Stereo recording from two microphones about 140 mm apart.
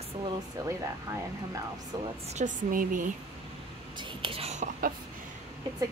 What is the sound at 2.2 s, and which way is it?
Speech, 60° right (ahead or behind).